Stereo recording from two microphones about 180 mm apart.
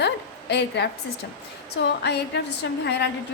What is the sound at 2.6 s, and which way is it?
Speech, 75° left (ahead or behind).